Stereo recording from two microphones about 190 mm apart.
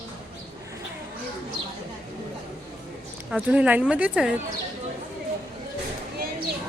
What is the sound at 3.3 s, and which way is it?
Speech, 5° right (ahead or behind).